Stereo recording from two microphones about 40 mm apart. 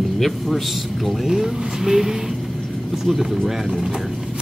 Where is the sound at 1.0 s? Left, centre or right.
Centre.